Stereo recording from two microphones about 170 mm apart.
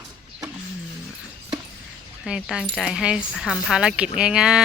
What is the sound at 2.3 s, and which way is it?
Speech, 5° right (ahead or behind).